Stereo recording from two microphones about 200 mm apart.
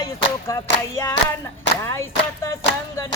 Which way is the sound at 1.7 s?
65° left (ahead or behind).